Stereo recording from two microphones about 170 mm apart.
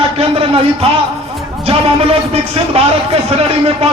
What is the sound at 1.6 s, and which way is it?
A man's voice, 35° right (ahead or behind).